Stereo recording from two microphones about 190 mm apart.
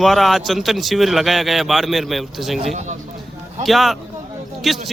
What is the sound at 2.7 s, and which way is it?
Speech, 40° right (ahead or behind).